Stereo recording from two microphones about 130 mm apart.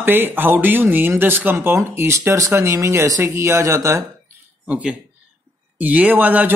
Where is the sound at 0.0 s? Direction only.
15° right (ahead or behind).